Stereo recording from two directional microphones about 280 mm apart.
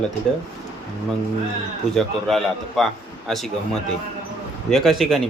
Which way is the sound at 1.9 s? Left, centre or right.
Centre.